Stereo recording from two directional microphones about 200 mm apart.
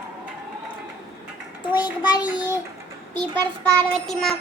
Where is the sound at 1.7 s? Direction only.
20° left (ahead or behind).